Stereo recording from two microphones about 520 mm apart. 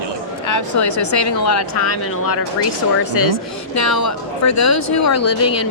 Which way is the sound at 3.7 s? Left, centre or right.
Left.